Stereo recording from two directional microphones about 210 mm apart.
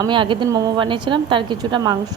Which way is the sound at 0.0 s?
25° right (ahead or behind).